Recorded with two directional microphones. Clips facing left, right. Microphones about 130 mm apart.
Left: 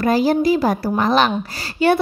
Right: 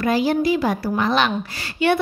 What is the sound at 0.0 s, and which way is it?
A woman's voice, 40° left (ahead or behind).